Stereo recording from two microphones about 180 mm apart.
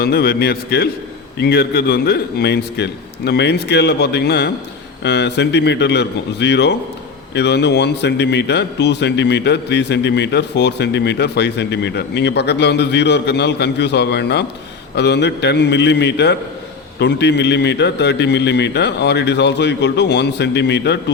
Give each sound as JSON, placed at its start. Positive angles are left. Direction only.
{"t": 0.0, "sound": "a man's voice", "side_deg": 60}